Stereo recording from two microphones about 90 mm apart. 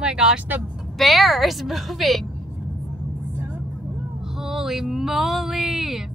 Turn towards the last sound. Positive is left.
turn(degrees=-5)  # may be behind; listen again after turning